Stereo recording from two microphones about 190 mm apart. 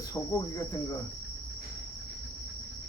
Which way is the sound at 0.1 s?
20° left (ahead or behind).